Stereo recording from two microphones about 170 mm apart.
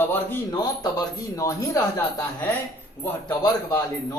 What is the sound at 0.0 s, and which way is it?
Speech, 10° left (ahead or behind).